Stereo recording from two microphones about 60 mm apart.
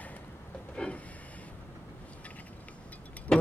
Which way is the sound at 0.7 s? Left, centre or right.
Centre.